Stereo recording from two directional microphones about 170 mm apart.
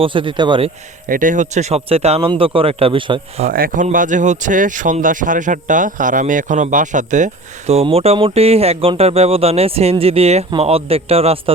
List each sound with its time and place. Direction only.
0.0 s speech: 30° right (ahead or behind)
1.0 s speech: 50° right (ahead or behind); by 3.5 s 35° right (ahead or behind)
3.5 s a man's voice: 55° right (ahead or behind)
7.7 s speech: 35° right (ahead or behind)